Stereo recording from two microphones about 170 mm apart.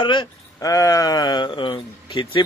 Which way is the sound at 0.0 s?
25° left (ahead or behind).